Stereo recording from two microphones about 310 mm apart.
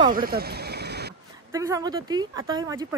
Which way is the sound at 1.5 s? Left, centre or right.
Centre.